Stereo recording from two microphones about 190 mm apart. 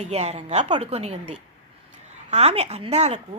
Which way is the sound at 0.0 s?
35° right (ahead or behind).